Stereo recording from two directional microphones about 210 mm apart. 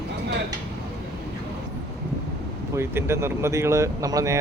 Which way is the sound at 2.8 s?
10° right (ahead or behind).